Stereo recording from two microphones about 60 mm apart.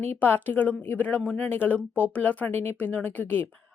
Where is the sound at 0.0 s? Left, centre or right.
Left.